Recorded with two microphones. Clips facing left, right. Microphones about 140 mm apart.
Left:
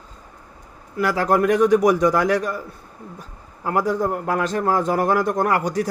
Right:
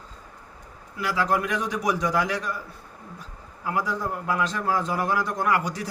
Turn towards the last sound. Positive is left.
turn(degrees=45)  # may be behind; listen again after turning